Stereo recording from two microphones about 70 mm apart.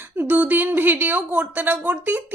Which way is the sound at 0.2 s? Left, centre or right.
Right.